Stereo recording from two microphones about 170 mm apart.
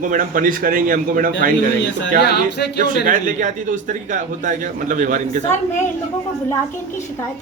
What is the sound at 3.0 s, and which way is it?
A man's voice, 50° right (ahead or behind).